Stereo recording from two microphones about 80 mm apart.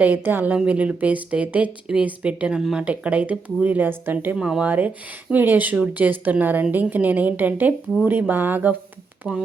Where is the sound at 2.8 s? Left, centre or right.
Centre.